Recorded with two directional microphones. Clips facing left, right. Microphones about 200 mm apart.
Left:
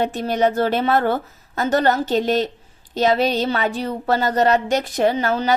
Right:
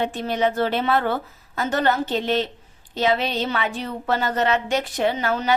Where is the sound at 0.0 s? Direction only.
45° left (ahead or behind).